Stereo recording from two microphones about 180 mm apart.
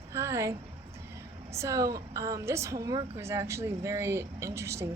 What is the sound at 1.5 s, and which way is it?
A woman's voice, 15° right (ahead or behind).